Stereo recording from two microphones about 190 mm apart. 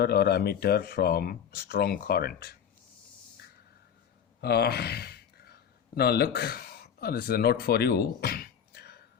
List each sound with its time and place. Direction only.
0.0 s speech: 55° left (ahead or behind)
4.4 s gasp: 55° left (ahead or behind)
6.0 s speech: 55° left (ahead or behind)